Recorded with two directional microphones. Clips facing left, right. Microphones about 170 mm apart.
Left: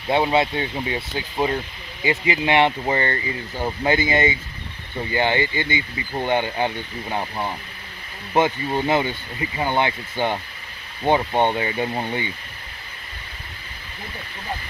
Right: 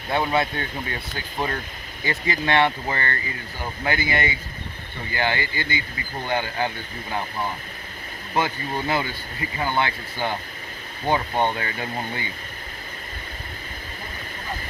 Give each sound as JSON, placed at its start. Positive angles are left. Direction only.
{"t": 0.1, "sound": "speech", "side_deg": 20}
{"t": 8.4, "sound": "speech", "side_deg": 20}